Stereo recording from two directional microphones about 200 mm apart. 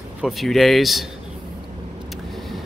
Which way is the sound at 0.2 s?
Centre (ahead or behind).